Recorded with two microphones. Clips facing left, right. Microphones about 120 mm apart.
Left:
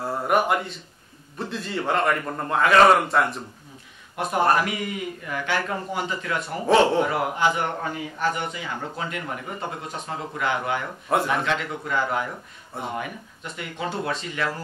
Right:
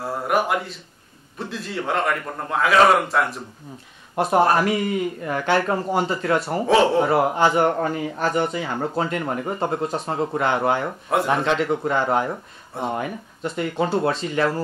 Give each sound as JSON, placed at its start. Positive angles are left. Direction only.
{"t": 0.0, "sound": "a man's voice", "side_deg": 0}
{"t": 5.2, "sound": "a man's voice", "side_deg": -35}
{"t": 6.7, "sound": "a man's voice", "side_deg": 0}
{"t": 7.0, "sound": "a man's voice", "side_deg": -35}